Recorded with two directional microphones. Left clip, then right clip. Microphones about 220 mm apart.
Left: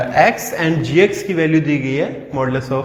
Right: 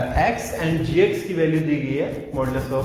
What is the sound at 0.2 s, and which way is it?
Speech, 45° left (ahead or behind).